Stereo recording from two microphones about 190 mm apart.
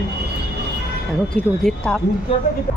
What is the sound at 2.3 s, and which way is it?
Speech, 25° left (ahead or behind).